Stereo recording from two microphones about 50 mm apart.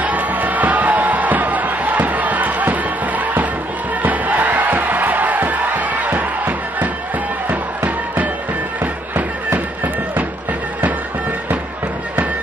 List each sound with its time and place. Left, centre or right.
0.0 s music: right
4.0 s crowd: right
7.4 s music: right